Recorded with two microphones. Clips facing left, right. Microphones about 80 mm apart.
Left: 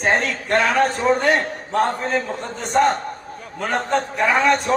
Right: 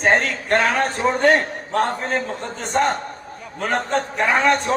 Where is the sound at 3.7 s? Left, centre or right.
Right.